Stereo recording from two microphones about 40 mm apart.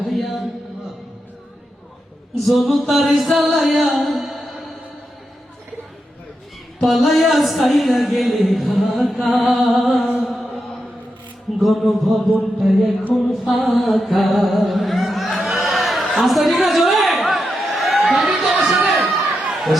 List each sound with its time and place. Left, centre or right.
0.1 s a sound: centre
2.5 s speech: centre
6.8 s speech: centre
10.2 s mantra: centre
11.6 s speech: centre
13.5 s music: centre
16.6 s a sound: centre
18.9 s crowd: centre